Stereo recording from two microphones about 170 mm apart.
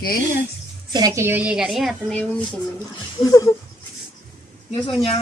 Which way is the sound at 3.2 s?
20° left (ahead or behind).